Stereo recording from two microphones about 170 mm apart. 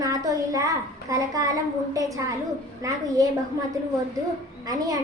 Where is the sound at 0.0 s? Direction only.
20° right (ahead or behind).